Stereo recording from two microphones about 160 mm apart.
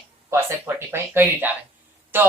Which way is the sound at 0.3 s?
15° right (ahead or behind).